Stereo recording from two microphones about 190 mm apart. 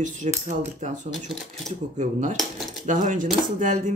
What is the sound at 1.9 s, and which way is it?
Speech, 40° right (ahead or behind).